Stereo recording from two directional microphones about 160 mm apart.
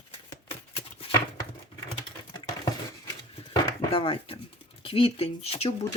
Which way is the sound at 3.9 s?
35° left (ahead or behind).